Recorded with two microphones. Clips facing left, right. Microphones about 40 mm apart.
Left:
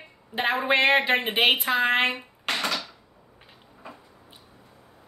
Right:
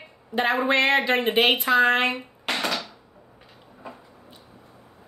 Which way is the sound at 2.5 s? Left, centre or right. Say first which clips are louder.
Right 1 dB; centre.